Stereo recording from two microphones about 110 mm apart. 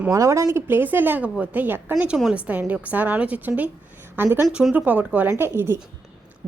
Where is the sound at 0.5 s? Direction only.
20° right (ahead or behind).